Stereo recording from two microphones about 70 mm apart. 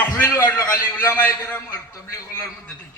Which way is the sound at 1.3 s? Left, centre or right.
Left.